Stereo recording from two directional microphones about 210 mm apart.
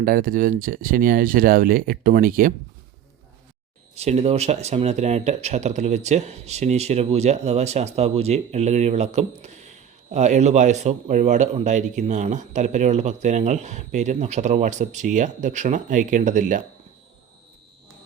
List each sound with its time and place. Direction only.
0.0 s speech: 40° right (ahead or behind)
3.9 s speech: 30° right (ahead or behind)